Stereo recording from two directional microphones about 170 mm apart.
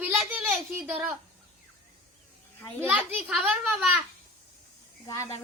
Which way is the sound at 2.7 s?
10° right (ahead or behind).